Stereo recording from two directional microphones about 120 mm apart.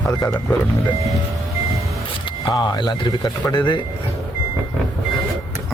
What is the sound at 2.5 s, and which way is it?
Speech, 40° left (ahead or behind).